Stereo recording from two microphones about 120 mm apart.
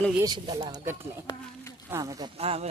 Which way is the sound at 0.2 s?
40° right (ahead or behind).